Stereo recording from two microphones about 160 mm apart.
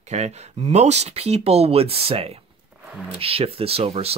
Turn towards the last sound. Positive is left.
turn(degrees=-40)  # may be behind; listen again after turning